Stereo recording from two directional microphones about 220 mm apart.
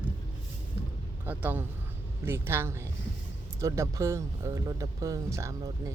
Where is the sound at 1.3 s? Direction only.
10° right (ahead or behind).